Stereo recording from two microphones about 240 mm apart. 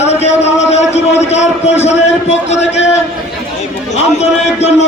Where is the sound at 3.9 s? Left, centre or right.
Left.